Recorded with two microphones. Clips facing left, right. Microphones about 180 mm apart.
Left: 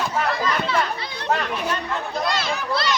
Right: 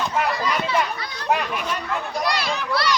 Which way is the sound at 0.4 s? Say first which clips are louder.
Even; 10° right (ahead or behind).